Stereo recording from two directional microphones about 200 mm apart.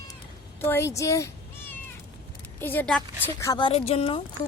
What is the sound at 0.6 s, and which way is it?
A woman's voice, 15° left (ahead or behind).